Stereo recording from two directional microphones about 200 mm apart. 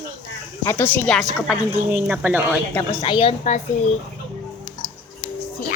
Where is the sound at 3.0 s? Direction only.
25° left (ahead or behind).